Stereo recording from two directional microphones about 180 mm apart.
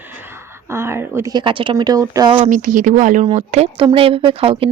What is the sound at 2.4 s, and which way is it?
Speech, 45° right (ahead or behind).